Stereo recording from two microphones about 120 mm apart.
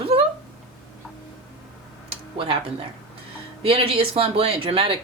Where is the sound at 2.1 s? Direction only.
50° right (ahead or behind).